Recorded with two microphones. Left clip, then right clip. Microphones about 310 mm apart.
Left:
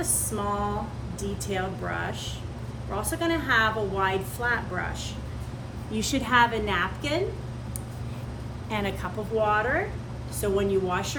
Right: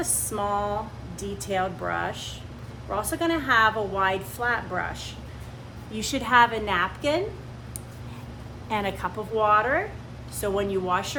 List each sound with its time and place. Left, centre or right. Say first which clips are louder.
0.0 s a sound: right 2 dB; centre
1.2 s a woman's voice: right 3 dB; centre
5.9 s a woman's voice: right 2 dB; centre
8.7 s a woman's voice: right 3 dB; centre